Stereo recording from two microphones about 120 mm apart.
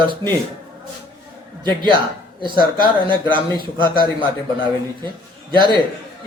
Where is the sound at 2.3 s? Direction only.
40° right (ahead or behind).